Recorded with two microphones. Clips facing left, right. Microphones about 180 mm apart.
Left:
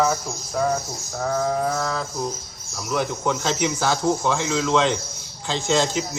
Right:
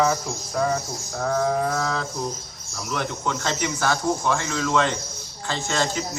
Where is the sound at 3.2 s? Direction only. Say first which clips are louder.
Left 3 dB; 10° left (ahead or behind).